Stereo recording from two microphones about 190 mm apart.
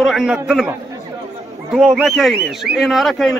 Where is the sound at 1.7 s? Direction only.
5° right (ahead or behind).